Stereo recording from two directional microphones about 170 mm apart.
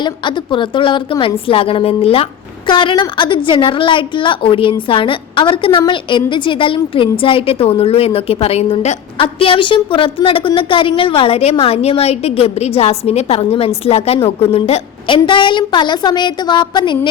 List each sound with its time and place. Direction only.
0.0 s a woman's voice: 25° left (ahead or behind)